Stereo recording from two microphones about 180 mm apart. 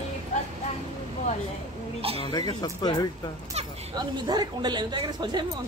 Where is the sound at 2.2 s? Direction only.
25° left (ahead or behind).